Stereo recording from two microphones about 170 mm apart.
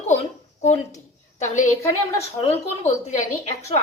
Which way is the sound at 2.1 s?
35° left (ahead or behind).